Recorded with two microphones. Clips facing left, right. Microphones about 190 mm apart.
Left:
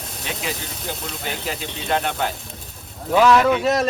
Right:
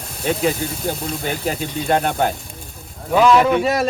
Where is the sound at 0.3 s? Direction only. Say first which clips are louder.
Right 10 dB; 45° right (ahead or behind).